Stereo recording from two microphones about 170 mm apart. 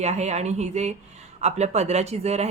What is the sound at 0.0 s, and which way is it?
Speech, 40° right (ahead or behind).